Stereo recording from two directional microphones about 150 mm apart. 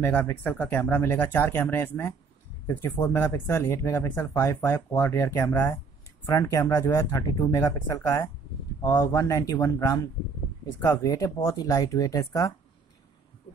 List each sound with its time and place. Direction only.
0.0 s speech: 10° left (ahead or behind)